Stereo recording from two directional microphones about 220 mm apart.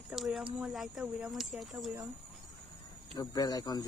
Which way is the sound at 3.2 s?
15° left (ahead or behind).